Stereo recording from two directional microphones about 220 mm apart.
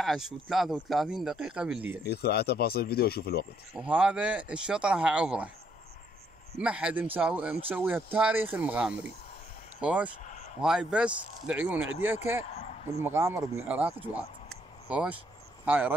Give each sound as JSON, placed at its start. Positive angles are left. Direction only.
{"t": 0.0, "sound": "speech", "side_deg": 0}
{"t": 2.0, "sound": "speech", "side_deg": 45}
{"t": 3.7, "sound": "speech", "side_deg": -5}
{"t": 6.6, "sound": "speech", "side_deg": -5}
{"t": 10.2, "sound": "a sound", "side_deg": 35}
{"t": 10.6, "sound": "speech", "side_deg": -5}
{"t": 12.4, "sound": "a sound", "side_deg": 30}
{"t": 13.0, "sound": "speech", "side_deg": -10}